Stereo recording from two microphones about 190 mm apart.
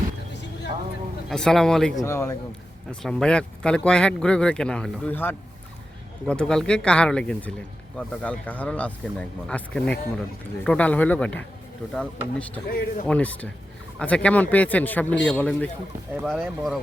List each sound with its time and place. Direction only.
1.3 s speech: centre (ahead or behind)
2.0 s a man's voice: 15° left (ahead or behind)
2.9 s a man's voice: 5° left (ahead or behind)
12.6 s speech: 50° left (ahead or behind)
13.1 s a man's voice: 5° left (ahead or behind)